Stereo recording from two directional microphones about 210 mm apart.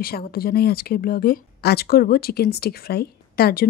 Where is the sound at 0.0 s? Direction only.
45° left (ahead or behind).